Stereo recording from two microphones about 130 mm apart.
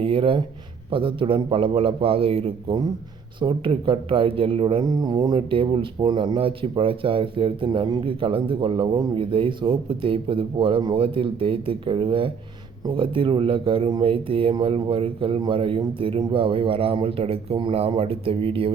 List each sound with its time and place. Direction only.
0.0 s a man's voice: 45° right (ahead or behind)
4.8 s a man's voice: 30° right (ahead or behind)